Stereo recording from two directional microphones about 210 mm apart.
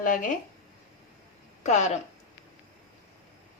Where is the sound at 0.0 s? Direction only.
40° left (ahead or behind).